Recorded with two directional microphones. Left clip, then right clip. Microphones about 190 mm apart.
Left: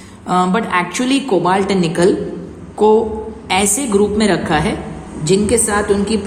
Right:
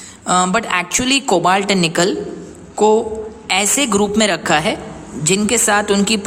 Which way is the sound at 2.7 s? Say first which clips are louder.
Left 1 dB; 20° right (ahead or behind).